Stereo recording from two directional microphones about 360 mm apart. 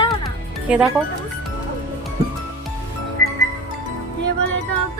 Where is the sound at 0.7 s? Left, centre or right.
Centre.